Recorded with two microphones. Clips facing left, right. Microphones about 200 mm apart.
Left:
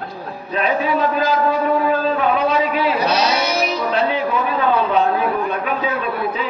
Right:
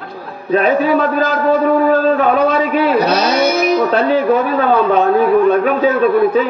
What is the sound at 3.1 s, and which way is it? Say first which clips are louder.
Music: right 5 dB; 50° right (ahead or behind).